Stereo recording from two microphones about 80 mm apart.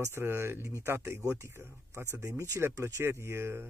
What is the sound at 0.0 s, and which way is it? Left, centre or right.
Speech, right.